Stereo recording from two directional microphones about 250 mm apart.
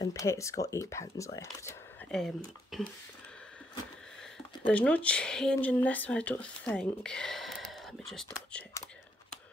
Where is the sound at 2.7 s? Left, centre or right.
Centre.